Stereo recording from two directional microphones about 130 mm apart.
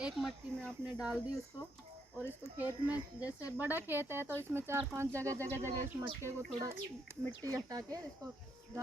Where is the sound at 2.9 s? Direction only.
10° right (ahead or behind).